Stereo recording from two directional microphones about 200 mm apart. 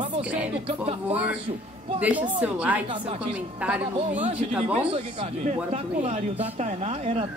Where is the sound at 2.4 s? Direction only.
5° right (ahead or behind).